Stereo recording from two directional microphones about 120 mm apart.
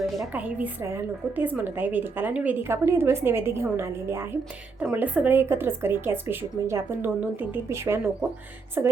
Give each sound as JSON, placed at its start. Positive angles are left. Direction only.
{"t": 0.3, "sound": "a woman's voice", "side_deg": -15}